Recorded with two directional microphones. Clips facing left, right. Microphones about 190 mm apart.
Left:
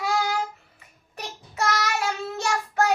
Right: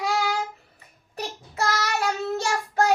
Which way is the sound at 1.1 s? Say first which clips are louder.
Right 2 dB; 35° right (ahead or behind).